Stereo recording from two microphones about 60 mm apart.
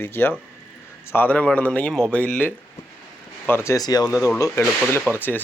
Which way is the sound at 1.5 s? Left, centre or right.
Left.